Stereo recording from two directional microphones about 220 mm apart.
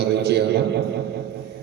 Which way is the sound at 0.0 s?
50° right (ahead or behind).